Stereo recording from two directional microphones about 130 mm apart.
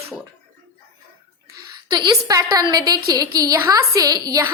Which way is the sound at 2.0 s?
30° right (ahead or behind).